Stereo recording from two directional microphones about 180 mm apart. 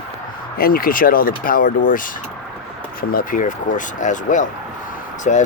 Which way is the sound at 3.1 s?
50° left (ahead or behind).